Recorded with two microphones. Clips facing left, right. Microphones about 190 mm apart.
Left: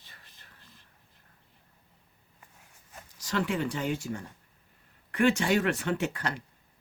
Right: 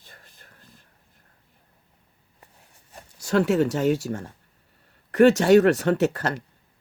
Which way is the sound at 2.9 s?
40° right (ahead or behind).